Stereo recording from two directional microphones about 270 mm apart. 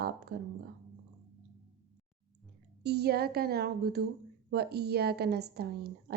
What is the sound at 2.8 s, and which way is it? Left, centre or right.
A woman's voice, right.